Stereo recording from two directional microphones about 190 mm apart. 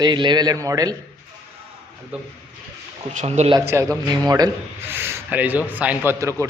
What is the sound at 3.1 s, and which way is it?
Speech, 35° right (ahead or behind).